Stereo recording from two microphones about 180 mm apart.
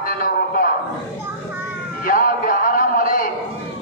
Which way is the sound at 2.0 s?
50° left (ahead or behind).